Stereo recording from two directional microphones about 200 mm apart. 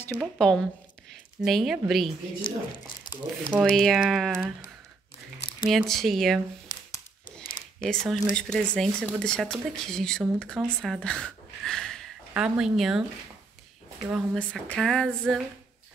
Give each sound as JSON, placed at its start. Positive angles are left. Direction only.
{"t": 0.1, "sound": "speech", "side_deg": 0}
{"t": 2.4, "sound": "speech", "side_deg": 25}
{"t": 3.7, "sound": "speech", "side_deg": 0}
{"t": 5.6, "sound": "speech", "side_deg": 0}
{"t": 6.7, "sound": "a sound", "side_deg": 20}
{"t": 7.8, "sound": "speech", "side_deg": 0}
{"t": 14.0, "sound": "speech", "side_deg": 0}